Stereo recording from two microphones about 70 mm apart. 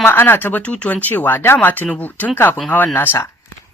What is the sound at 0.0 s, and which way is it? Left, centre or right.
Speech, left.